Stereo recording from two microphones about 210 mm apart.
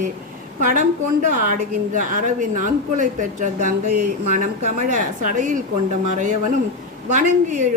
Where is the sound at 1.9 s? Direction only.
35° right (ahead or behind).